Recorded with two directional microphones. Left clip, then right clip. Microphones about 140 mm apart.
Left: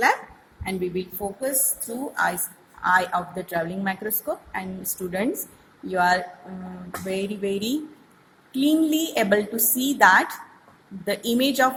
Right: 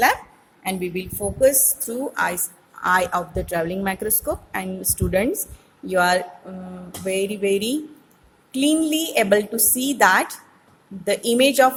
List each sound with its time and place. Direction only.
0.6 s a woman's voice: 85° right; by 11.7 s 40° right (ahead or behind)